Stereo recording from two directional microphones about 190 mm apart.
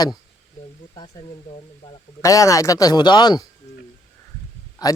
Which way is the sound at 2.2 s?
15° left (ahead or behind).